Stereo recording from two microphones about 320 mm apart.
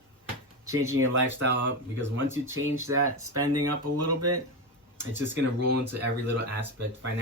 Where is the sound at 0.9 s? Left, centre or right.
Right.